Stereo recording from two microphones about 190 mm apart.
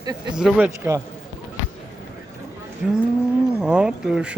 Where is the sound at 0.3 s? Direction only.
5° right (ahead or behind).